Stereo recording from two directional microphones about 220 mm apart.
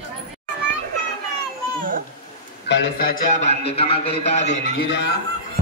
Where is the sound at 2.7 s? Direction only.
45° left (ahead or behind).